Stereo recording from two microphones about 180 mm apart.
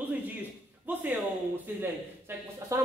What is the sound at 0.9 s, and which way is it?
Speech, 10° right (ahead or behind).